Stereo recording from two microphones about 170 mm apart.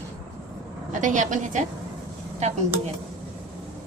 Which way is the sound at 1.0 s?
50° right (ahead or behind).